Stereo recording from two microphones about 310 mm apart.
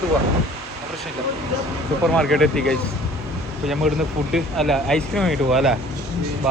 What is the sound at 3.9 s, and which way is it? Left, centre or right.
Speech, centre.